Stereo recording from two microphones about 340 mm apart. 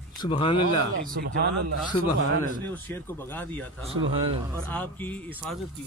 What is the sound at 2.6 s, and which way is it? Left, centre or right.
Speech, centre.